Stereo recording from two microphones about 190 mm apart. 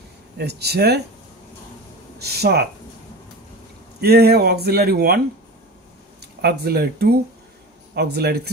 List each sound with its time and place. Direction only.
0.4 s speech: 60° right (ahead or behind)
2.1 s speech: 55° right (ahead or behind)
4.0 s speech: 55° right (ahead or behind)
6.4 s speech: 55° right (ahead or behind)